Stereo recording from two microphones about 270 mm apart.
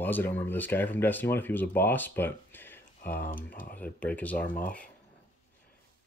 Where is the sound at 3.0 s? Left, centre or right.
Left.